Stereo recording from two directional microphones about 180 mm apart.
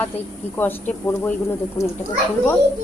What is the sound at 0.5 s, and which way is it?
Speech, 10° left (ahead or behind).